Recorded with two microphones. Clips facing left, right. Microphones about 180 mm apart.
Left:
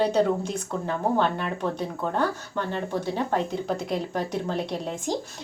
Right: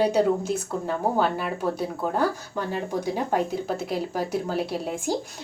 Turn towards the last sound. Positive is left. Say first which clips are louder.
# right 2 dB
turn(degrees=-10)  # may be behind; listen again after turning